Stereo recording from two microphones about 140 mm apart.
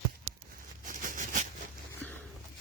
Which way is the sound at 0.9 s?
75° right (ahead or behind).